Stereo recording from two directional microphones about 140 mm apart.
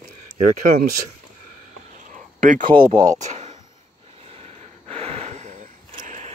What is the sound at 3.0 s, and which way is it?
Speech, 60° right (ahead or behind).